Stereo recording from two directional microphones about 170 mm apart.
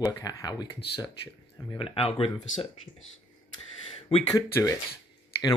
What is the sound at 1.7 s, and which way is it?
Speech, 35° left (ahead or behind).